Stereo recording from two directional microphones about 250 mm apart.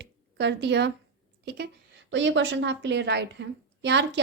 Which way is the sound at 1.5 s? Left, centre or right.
Right.